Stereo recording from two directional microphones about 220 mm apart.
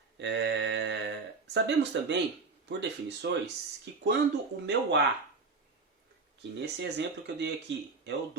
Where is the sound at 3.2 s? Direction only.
50° right (ahead or behind).